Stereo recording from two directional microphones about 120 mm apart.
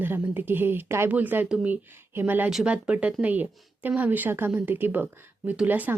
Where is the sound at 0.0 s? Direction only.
15° right (ahead or behind).